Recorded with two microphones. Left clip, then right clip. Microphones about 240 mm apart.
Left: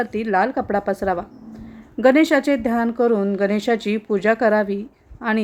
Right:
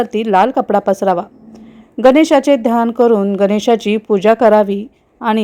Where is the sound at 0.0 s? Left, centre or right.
Right.